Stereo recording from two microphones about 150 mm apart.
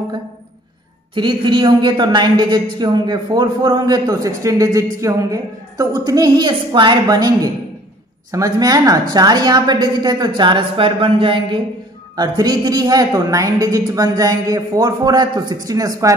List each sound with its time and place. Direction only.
1.1 s a man's voice: 30° right (ahead or behind)